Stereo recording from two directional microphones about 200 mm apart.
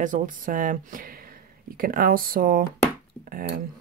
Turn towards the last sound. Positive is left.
turn(degrees=-45)  # may be behind; listen again after turning